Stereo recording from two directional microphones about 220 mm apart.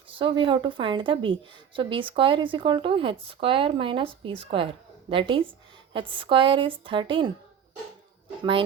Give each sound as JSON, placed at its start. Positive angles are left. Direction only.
{"t": 0.1, "sound": "speech", "side_deg": -20}